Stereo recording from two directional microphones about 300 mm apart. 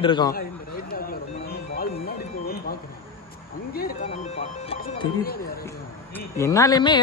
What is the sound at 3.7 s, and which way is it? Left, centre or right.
Music, left.